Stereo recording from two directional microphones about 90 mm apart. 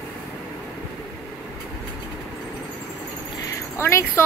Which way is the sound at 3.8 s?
30° left (ahead or behind).